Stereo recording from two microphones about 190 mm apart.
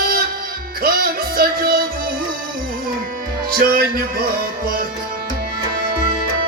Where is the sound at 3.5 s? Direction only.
50° right (ahead or behind).